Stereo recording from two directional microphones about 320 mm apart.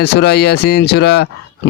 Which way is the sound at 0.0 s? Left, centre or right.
Left.